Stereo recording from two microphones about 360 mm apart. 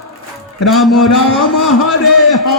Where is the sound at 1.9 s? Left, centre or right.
Left.